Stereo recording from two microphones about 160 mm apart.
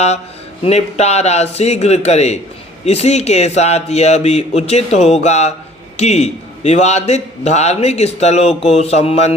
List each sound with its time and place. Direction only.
0.6 s a man's voice: 45° left (ahead or behind)